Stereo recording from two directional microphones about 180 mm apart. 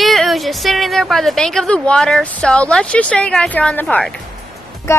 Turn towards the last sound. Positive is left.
turn(degrees=15)  # may be behind; listen again after turning